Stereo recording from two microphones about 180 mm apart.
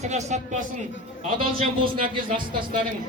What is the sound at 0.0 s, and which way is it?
Speech, 40° right (ahead or behind).